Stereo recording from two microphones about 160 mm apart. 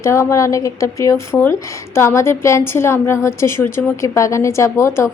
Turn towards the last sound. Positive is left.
turn(degrees=20)  # may be behind; listen again after turning